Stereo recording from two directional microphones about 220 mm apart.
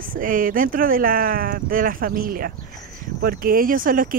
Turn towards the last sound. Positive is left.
turn(degrees=-40)  # may be behind; listen again after turning